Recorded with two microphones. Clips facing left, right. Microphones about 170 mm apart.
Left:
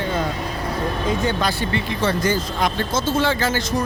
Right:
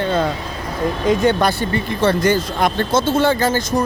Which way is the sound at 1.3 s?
60° right (ahead or behind).